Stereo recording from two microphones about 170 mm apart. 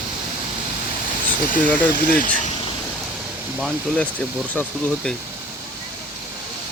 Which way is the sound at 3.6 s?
Centre (ahead or behind).